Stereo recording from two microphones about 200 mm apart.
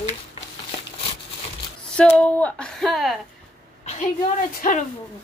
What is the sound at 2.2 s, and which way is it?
Speech, 5° left (ahead or behind).